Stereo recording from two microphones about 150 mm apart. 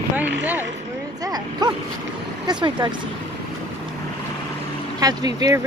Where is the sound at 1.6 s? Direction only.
25° right (ahead or behind).